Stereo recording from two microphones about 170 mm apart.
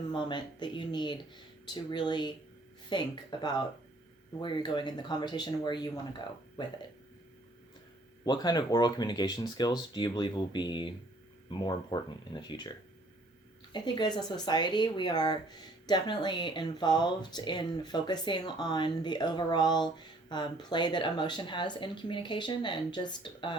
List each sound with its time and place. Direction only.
0.1 s speech: 25° left (ahead or behind)
8.2 s speech: 25° left (ahead or behind)
13.7 s speech: 25° left (ahead or behind)